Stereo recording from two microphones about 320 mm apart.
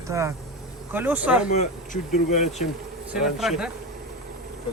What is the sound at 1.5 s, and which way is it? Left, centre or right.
Speech, left.